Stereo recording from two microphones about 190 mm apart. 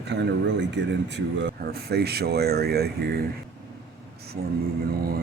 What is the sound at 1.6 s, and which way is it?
Speech, 55° right (ahead or behind).